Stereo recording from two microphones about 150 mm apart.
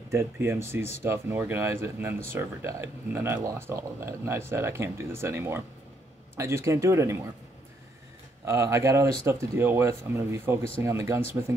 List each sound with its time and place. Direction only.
0.1 s speech: 15° right (ahead or behind)
8.5 s speech: 20° right (ahead or behind)